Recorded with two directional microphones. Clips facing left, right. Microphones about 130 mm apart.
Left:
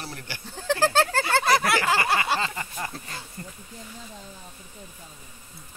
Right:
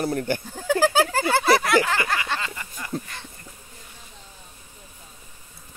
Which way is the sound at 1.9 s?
30° left (ahead or behind).